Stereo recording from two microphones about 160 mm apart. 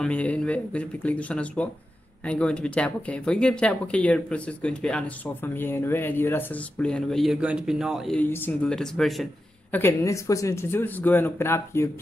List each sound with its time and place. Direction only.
0.0 s speech: 10° left (ahead or behind)
8.2 s speech: 10° left (ahead or behind)
9.7 s speech: 15° left (ahead or behind)